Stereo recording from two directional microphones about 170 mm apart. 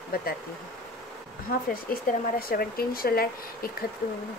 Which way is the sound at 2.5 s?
60° left (ahead or behind).